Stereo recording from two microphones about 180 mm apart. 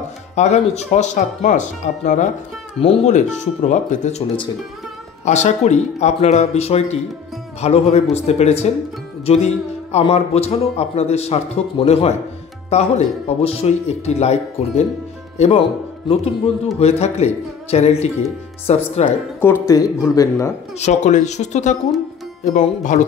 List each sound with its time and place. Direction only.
0.4 s speech: 40° left (ahead or behind)
5.2 s speech: 40° left (ahead or behind)
9.2 s music: 35° left (ahead or behind)
9.9 s speech: 35° left (ahead or behind)
16.8 s speech: 35° left (ahead or behind)
19.4 s speech: 15° left (ahead or behind)
20.8 s speech: 40° left (ahead or behind)